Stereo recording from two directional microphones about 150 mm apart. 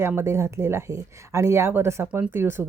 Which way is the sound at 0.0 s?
15° right (ahead or behind).